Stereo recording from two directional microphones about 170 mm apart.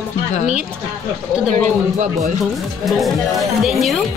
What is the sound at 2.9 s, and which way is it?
Speech, centre (ahead or behind).